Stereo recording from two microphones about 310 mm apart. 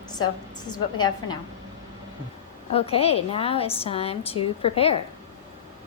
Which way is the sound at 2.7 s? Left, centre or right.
Centre.